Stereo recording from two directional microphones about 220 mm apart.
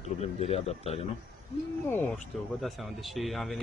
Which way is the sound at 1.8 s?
5° left (ahead or behind).